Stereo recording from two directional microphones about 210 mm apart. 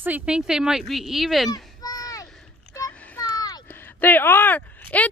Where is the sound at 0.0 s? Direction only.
5° right (ahead or behind).